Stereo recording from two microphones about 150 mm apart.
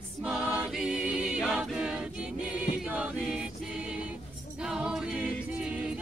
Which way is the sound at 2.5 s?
5° right (ahead or behind).